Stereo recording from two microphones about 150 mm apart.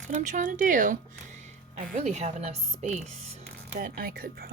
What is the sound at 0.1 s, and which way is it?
Speech, 55° right (ahead or behind).